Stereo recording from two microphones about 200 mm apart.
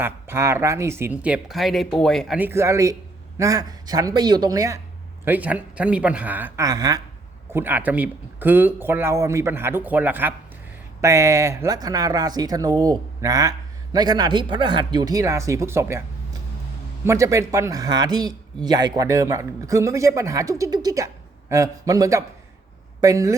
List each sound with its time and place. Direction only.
0.0 s a man's voice: 10° right (ahead or behind)
17.1 s a man's voice: 15° right (ahead or behind)